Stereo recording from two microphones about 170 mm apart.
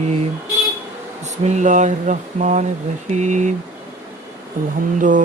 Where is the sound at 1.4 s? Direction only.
45° right (ahead or behind).